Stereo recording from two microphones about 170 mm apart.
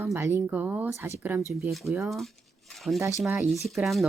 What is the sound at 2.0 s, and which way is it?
Speech, centre (ahead or behind).